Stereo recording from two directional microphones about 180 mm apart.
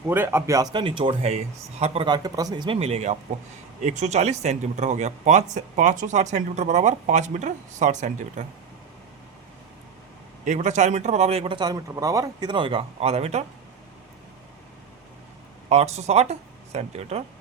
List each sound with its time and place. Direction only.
0.1 s speech: 10° right (ahead or behind); by 2.0 s 35° right (ahead or behind)
2.0 s speech: 20° right (ahead or behind); by 8.4 s 45° right (ahead or behind)
10.4 s speech: 40° right (ahead or behind)
15.7 s speech: 35° right (ahead or behind)